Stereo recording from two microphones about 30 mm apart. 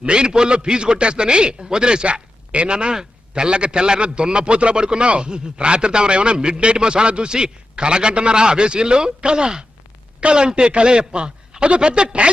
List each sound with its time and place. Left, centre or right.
0.0 s a man's voice: right
2.5 s speech: right
2.7 s a man's voice: right